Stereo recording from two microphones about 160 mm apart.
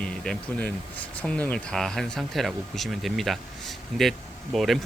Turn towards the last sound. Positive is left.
turn(degrees=0)  # may be behind; listen again after turning